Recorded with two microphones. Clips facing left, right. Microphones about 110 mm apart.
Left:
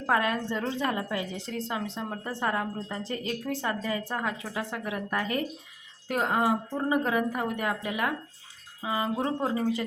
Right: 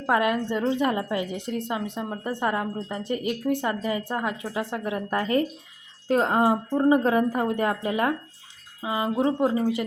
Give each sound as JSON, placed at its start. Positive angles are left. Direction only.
{"t": 0.1, "sound": "a woman's voice", "side_deg": -15}
{"t": 8.8, "sound": "a woman's voice", "side_deg": -20}